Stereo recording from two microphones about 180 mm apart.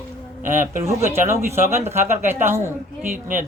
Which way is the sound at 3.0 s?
45° right (ahead or behind).